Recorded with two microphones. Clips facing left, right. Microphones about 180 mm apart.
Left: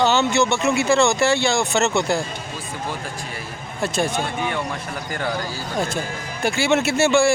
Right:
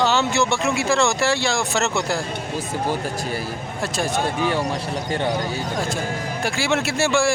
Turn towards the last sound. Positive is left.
turn(degrees=0)  # may be behind; listen again after turning